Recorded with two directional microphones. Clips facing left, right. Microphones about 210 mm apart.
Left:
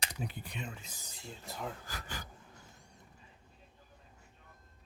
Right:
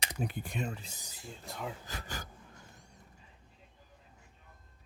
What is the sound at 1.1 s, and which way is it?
Speech, centre (ahead or behind).